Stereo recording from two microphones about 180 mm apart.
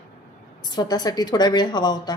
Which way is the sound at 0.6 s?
20° left (ahead or behind).